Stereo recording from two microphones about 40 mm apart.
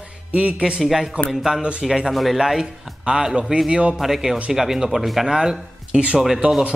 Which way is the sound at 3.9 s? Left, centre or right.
Centre.